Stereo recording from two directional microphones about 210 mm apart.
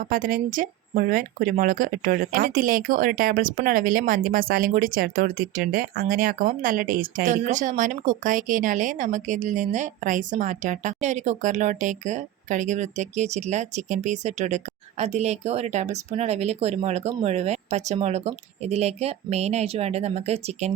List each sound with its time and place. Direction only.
0.0 s speech: 40° right (ahead or behind)